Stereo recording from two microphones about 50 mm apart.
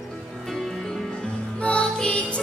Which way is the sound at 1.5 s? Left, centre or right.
Left.